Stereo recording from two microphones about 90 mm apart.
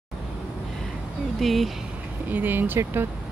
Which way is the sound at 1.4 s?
Centre (ahead or behind).